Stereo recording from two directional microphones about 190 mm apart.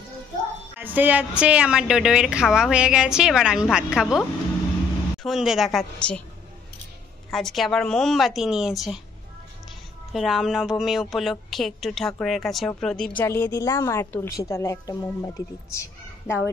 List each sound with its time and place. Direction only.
0.7 s a woman's voice: 10° right (ahead or behind)
5.2 s a woman's voice: centre (ahead or behind)
7.2 s a woman's voice: centre (ahead or behind)
10.1 s a woman's voice: centre (ahead or behind); by 16.3 s 15° left (ahead or behind)